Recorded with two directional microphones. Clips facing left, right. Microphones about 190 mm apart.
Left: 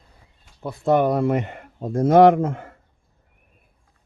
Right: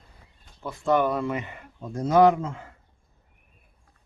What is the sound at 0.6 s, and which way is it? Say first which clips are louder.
Speech: left 4 dB; 35° left (ahead or behind).